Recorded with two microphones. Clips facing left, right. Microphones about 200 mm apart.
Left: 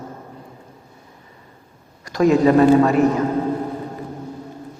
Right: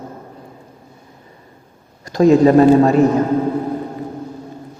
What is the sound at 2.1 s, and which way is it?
Speech, 25° right (ahead or behind).